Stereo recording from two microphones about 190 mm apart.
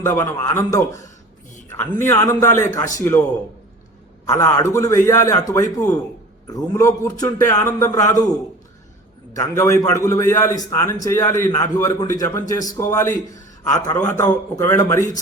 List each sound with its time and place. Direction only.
0.1 s a man's voice: 15° left (ahead or behind)
2.0 s a man's voice: 15° left (ahead or behind)
4.3 s a man's voice: 15° left (ahead or behind)
9.3 s a man's voice: 15° left (ahead or behind)